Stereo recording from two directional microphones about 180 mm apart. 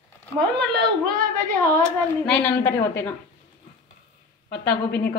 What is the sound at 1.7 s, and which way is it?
Speech, 5° left (ahead or behind).